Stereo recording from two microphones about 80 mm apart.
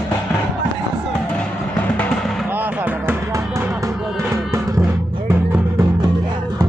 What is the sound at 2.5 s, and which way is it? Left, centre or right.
Music, right.